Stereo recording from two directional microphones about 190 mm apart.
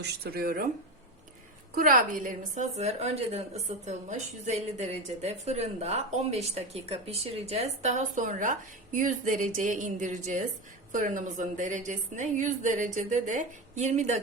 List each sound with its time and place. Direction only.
0.0 s speech: 55° right (ahead or behind)
1.7 s a woman's voice: 45° right (ahead or behind)